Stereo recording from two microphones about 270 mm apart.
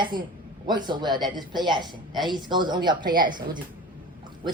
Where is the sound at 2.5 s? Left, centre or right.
Centre.